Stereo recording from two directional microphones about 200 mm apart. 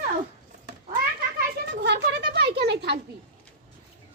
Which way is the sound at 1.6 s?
60° right (ahead or behind).